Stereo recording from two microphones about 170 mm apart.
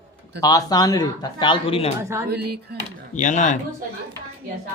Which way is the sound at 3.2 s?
45° left (ahead or behind).